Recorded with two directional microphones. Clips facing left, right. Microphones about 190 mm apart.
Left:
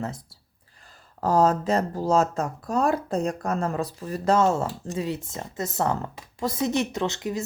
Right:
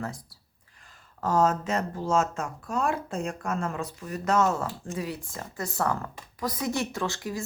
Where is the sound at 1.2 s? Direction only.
35° left (ahead or behind).